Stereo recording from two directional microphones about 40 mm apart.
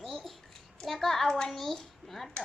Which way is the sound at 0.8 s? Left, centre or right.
Centre.